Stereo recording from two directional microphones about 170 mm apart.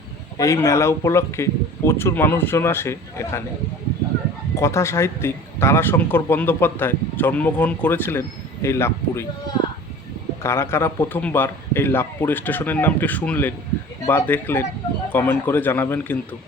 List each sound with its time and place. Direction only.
0.3 s speech: 15° left (ahead or behind)
4.5 s speech: 15° left (ahead or behind)
10.4 s speech: 15° left (ahead or behind)